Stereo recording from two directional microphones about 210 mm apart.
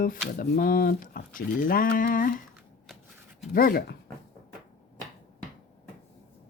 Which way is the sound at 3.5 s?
45° left (ahead or behind).